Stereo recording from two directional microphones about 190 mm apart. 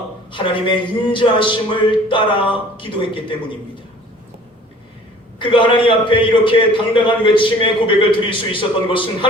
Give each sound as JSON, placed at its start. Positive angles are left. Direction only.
{"t": 0.3, "sound": "a man's voice", "side_deg": 25}
{"t": 5.4, "sound": "a man's voice", "side_deg": 25}